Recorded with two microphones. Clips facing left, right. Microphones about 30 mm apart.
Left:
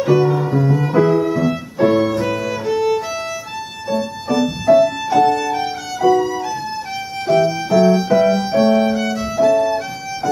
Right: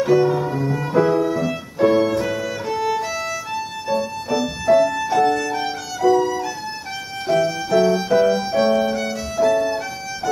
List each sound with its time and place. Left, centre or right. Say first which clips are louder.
0.1 s music: left 3 dB; centre
3.9 s violin: left 2 dB; centre
7.2 s music: left 4 dB; centre
8.0 s violin: left 2 dB; centre